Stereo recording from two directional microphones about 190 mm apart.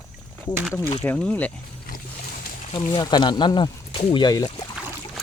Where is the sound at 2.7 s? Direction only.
25° left (ahead or behind).